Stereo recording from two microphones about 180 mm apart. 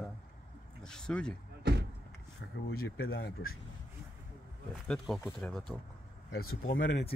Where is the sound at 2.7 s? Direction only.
60° left (ahead or behind).